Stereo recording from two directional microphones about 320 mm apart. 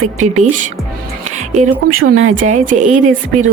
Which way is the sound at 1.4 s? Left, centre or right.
Right.